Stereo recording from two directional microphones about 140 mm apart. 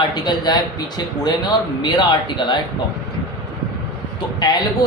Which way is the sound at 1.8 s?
30° left (ahead or behind).